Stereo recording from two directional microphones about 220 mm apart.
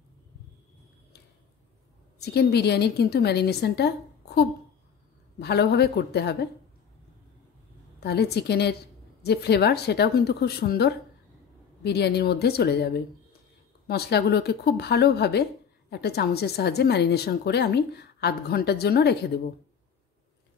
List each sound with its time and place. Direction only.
2.1 s speech: 45° left (ahead or behind)
8.0 s speech: 45° left (ahead or behind)